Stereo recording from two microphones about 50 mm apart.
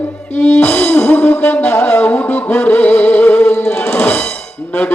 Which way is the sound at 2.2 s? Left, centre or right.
Left.